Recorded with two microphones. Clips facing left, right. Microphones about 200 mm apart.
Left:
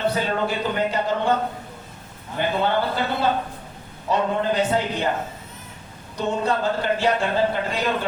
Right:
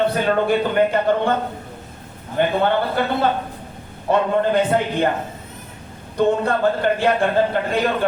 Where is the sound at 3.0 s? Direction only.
55° right (ahead or behind).